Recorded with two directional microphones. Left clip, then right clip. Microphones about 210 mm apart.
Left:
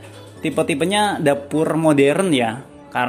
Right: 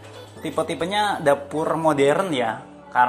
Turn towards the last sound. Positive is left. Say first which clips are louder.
# right 2 dB
turn(degrees=35)  # may be behind; listen again after turning